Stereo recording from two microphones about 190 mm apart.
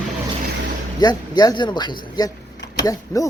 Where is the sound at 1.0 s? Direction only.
20° left (ahead or behind).